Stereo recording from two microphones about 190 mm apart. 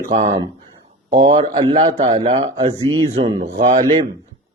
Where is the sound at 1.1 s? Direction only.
35° right (ahead or behind).